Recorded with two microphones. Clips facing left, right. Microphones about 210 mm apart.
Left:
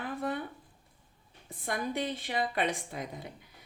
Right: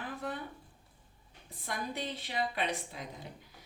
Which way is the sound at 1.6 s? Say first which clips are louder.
Left 5 dB; 50° left (ahead or behind).